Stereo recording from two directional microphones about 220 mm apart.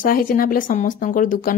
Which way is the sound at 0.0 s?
40° left (ahead or behind).